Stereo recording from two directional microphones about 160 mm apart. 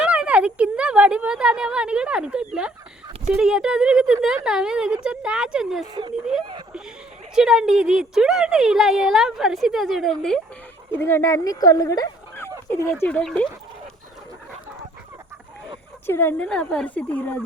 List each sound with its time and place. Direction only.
0.0 s a sound: 10° right (ahead or behind)
3.3 s a woman's voice: 5° right (ahead or behind)
5.9 s speech: 30° right (ahead or behind)
7.3 s a woman's voice: 5° right (ahead or behind)
10.9 s speech: 15° left (ahead or behind)
13.0 s speech: 10° left (ahead or behind)
16.0 s speech: 15° left (ahead or behind)